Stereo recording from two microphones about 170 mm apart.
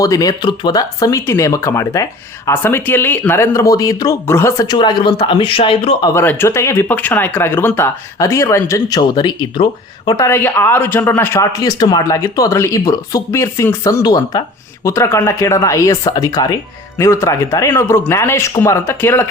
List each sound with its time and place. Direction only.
0.0 s speech: 20° left (ahead or behind)
6.1 s speech: 15° left (ahead or behind)